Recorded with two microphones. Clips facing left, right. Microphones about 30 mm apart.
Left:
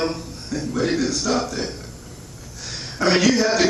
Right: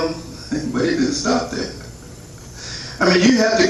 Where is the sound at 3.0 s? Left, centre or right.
Centre.